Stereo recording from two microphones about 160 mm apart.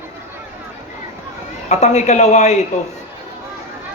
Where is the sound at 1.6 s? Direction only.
45° left (ahead or behind).